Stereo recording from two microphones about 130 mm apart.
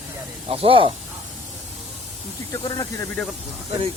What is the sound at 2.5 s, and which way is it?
Speech, 25° left (ahead or behind).